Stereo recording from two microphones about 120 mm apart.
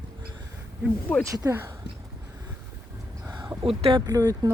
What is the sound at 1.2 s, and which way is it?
Speech, 25° right (ahead or behind).